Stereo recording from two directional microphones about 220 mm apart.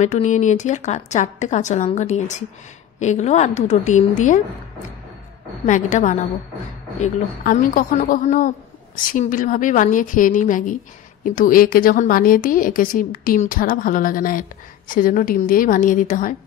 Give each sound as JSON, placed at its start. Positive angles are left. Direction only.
{"t": 0.0, "sound": "a woman's voice", "side_deg": 30}
{"t": 5.7, "sound": "a woman's voice", "side_deg": 35}